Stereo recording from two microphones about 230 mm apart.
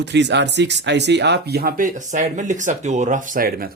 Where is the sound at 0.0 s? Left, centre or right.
Right.